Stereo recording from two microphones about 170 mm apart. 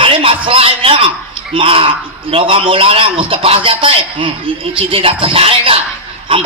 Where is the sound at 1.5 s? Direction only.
30° right (ahead or behind).